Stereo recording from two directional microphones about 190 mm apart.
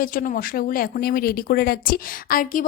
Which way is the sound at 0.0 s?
45° left (ahead or behind).